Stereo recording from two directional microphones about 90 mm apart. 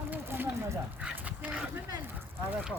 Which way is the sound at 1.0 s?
15° right (ahead or behind).